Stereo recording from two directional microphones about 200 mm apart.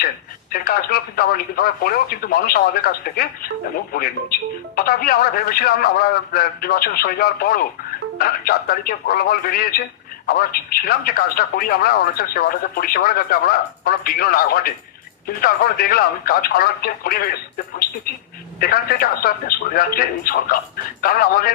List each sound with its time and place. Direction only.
0.5 s speech: 45° left (ahead or behind)
18.6 s speech: 45° left (ahead or behind)